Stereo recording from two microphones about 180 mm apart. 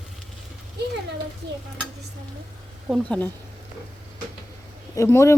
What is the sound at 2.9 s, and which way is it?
Speech, 5° left (ahead or behind).